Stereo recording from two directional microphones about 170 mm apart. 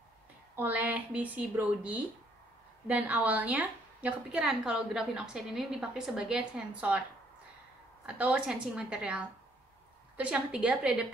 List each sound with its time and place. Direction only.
0.6 s a woman's voice: 10° right (ahead or behind)
8.0 s speech: 5° right (ahead or behind)